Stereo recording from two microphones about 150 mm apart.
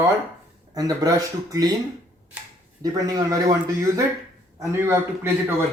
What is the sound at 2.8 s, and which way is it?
A man's voice, 25° right (ahead or behind).